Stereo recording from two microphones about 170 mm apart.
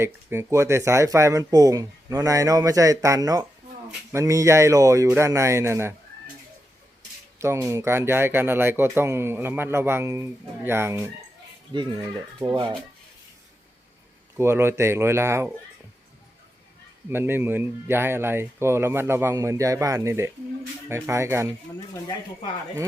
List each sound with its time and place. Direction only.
0.0 s speech: 15° right (ahead or behind)
7.3 s speech: 15° right (ahead or behind)
11.7 s speech: 30° right (ahead or behind)
14.3 s speech: 15° right (ahead or behind)
17.1 s speech: 15° right (ahead or behind)